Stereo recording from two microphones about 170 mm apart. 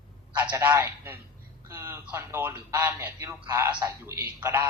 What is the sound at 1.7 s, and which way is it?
Speech, 15° right (ahead or behind).